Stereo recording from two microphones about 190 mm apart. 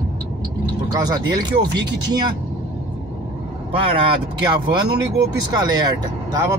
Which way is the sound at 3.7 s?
30° right (ahead or behind).